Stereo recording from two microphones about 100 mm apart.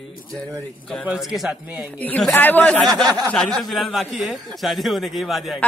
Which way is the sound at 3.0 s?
40° right (ahead or behind).